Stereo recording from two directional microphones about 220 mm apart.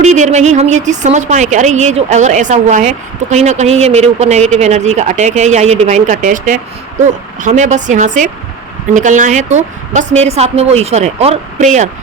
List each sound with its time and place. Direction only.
0.0 s a woman's voice: 30° right (ahead or behind)